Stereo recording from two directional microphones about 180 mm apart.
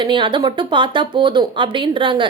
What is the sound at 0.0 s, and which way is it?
A woman's voice, 25° right (ahead or behind).